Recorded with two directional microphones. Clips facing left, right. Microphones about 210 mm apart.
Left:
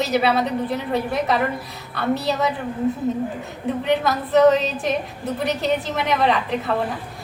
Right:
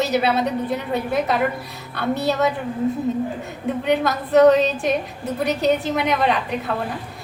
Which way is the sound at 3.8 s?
Centre (ahead or behind).